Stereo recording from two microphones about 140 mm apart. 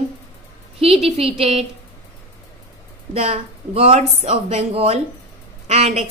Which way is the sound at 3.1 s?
45° right (ahead or behind).